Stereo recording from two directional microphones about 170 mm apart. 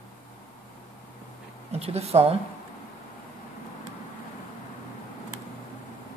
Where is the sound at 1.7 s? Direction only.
35° right (ahead or behind).